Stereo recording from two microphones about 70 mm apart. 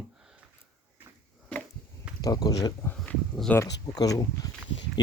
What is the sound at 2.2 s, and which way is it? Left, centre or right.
Speech, left.